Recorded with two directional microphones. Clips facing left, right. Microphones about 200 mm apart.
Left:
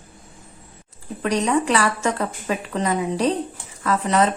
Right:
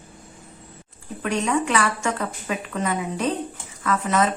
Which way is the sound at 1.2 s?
35° left (ahead or behind).